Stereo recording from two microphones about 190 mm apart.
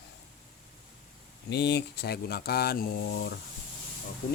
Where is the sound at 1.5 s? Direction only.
65° left (ahead or behind).